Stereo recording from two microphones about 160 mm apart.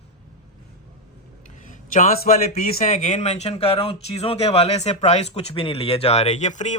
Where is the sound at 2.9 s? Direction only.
45° left (ahead or behind).